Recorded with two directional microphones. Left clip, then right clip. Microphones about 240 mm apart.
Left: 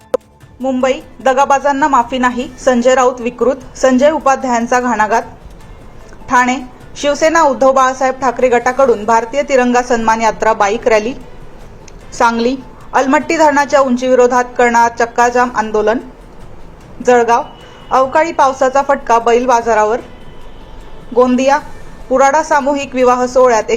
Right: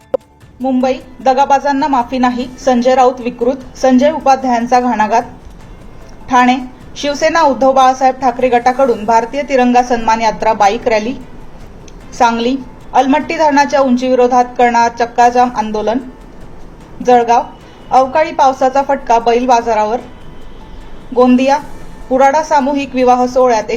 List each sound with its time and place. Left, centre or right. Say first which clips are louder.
1.2 s a woman's voice: right 1 dB; centre
6.2 s a woman's voice: right 2 dB; centre
12.1 s a woman's voice: even; left
17.0 s a woman's voice: right 1 dB; left
21.2 s a woman's voice: even; centre